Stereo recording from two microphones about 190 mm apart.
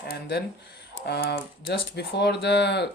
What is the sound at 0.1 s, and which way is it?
Speech, 55° left (ahead or behind).